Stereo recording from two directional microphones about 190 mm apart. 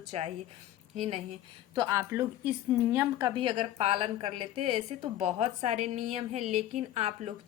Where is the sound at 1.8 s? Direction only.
15° right (ahead or behind).